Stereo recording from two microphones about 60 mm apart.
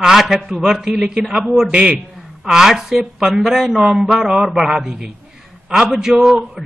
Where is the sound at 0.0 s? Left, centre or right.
Centre.